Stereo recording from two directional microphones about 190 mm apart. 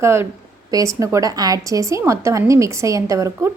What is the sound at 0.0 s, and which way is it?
A woman's voice, 15° right (ahead or behind).